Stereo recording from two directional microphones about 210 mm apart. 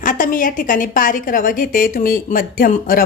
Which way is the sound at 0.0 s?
40° left (ahead or behind).